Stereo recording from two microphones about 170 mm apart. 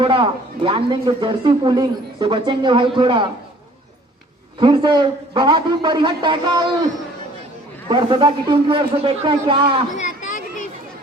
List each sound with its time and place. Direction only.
0.0 s speech: 30° right (ahead or behind)
4.6 s speech: 25° right (ahead or behind)
7.9 s speech: 25° right (ahead or behind)
10.0 s a sound: 50° left (ahead or behind)